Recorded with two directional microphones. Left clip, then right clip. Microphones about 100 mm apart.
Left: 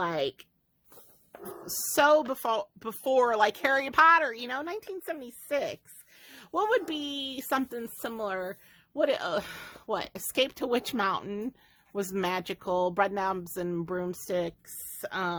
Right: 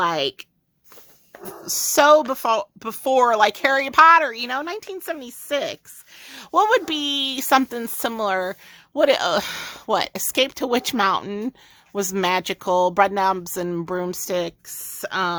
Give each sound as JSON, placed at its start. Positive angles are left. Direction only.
{"t": 0.0, "sound": "speech", "side_deg": -30}
{"t": 1.6, "sound": "a woman's voice", "side_deg": -40}
{"t": 6.2, "sound": "speech", "side_deg": -60}
{"t": 10.3, "sound": "speech", "side_deg": -40}
{"t": 15.0, "sound": "a woman's voice", "side_deg": -35}